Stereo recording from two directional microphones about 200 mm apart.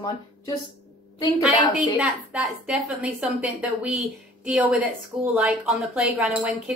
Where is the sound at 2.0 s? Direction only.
5° right (ahead or behind).